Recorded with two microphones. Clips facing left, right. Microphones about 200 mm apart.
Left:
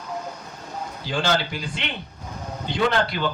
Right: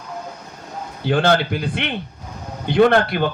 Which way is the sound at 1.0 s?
60° right (ahead or behind).